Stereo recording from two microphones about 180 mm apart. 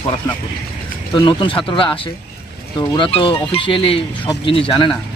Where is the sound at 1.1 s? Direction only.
25° left (ahead or behind).